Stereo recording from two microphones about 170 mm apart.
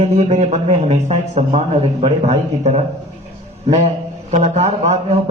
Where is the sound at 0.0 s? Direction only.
40° right (ahead or behind).